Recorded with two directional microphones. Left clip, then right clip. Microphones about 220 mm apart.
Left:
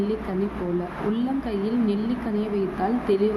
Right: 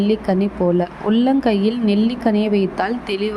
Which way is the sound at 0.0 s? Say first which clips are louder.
Right 8 dB; 35° right (ahead or behind).